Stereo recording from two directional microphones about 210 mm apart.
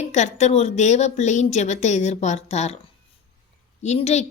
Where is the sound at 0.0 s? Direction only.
35° left (ahead or behind).